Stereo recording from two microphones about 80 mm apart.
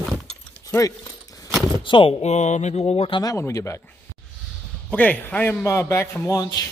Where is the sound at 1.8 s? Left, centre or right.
Left.